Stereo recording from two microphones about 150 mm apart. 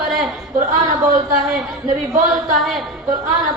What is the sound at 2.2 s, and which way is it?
Speech, centre (ahead or behind).